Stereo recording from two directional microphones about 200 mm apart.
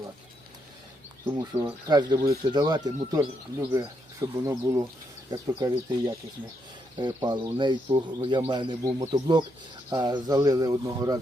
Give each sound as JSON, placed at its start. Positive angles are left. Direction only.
{"t": 1.4, "sound": "speech", "side_deg": -20}